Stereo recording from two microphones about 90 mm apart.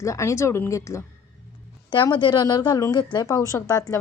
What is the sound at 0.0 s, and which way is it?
Speech, 35° left (ahead or behind).